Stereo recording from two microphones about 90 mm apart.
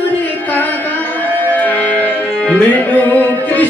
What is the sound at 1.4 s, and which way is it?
Music, 20° left (ahead or behind).